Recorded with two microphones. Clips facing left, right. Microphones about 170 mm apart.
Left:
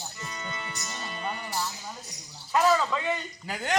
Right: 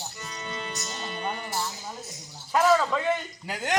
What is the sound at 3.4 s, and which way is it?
Speech, 10° right (ahead or behind).